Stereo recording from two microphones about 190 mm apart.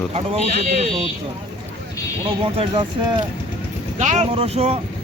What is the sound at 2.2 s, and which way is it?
Speech, 30° right (ahead or behind).